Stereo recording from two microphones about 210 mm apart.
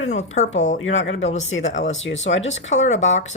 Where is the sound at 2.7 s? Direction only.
35° left (ahead or behind).